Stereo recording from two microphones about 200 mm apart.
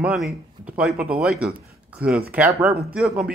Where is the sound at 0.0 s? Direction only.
Centre (ahead or behind).